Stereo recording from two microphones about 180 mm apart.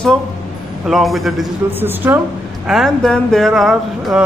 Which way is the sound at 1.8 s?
10° right (ahead or behind).